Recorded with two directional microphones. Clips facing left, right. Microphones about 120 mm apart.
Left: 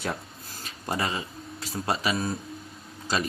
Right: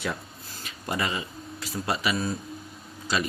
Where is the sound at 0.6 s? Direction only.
35° left (ahead or behind).